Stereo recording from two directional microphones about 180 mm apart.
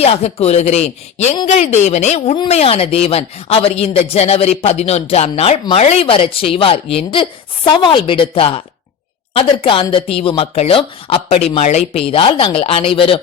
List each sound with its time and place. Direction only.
0.0 s speech: 35° left (ahead or behind)